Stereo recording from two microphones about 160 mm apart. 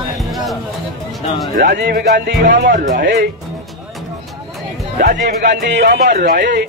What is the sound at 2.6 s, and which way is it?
Speech, 55° right (ahead or behind).